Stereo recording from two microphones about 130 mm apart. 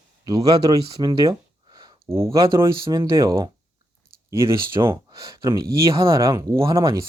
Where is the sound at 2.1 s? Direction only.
20° right (ahead or behind).